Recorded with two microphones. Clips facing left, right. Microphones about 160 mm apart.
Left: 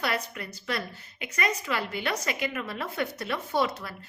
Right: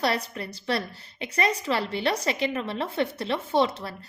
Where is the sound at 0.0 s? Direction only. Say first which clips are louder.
Right 4 dB; 30° right (ahead or behind).